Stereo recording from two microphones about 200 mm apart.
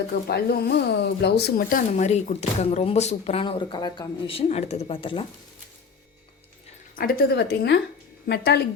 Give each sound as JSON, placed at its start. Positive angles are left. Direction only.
{"t": 0.3, "sound": "speech", "side_deg": 50}
{"t": 1.9, "sound": "speech", "side_deg": 35}
{"t": 6.9, "sound": "speech", "side_deg": 45}